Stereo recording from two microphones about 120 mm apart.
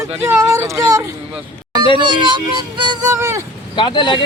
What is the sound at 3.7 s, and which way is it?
Speech, 40° left (ahead or behind).